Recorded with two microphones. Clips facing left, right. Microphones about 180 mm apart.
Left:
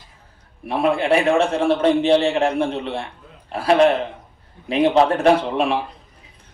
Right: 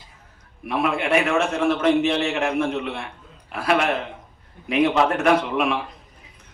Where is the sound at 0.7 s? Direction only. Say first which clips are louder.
Left 3 dB; 30° left (ahead or behind).